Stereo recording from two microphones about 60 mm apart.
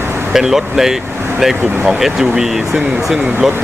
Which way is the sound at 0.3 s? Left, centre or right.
Centre.